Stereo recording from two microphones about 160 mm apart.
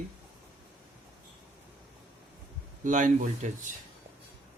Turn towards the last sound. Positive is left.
turn(degrees=-55)  # may be behind; listen again after turning